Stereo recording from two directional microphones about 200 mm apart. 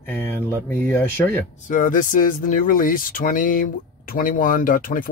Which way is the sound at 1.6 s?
40° left (ahead or behind).